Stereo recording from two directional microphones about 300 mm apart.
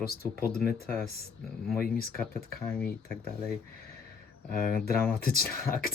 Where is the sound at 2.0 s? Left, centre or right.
Left.